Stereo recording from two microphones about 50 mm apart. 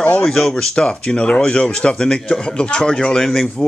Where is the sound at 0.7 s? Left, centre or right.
Left.